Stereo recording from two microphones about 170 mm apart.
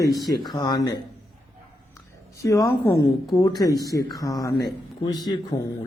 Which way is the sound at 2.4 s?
20° left (ahead or behind).